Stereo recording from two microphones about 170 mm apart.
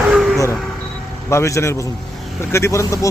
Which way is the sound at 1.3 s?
15° left (ahead or behind).